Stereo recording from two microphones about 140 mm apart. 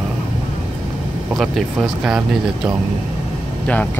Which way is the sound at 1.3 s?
Centre (ahead or behind).